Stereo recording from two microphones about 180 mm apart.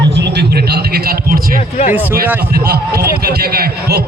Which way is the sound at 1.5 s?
40° left (ahead or behind).